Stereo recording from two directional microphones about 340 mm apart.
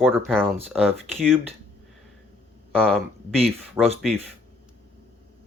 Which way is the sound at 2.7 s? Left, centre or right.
Centre.